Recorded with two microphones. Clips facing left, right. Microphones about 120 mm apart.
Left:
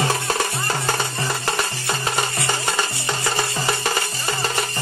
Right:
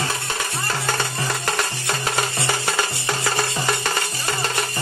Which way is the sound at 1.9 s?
Centre (ahead or behind).